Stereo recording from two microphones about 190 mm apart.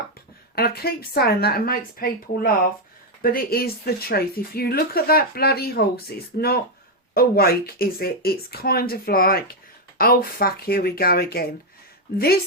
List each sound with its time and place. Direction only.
0.5 s a woman's voice: 55° left (ahead or behind)